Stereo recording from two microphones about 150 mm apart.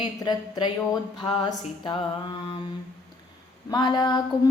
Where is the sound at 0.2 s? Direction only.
25° left (ahead or behind).